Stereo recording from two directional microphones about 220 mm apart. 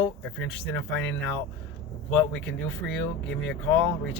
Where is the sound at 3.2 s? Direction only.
55° left (ahead or behind).